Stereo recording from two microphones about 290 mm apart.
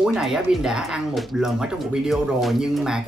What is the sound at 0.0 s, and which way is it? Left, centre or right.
Speech, centre.